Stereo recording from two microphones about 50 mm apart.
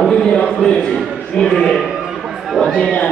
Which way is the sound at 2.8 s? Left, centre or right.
Left.